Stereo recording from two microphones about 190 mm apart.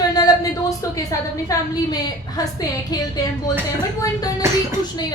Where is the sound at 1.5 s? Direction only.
20° left (ahead or behind).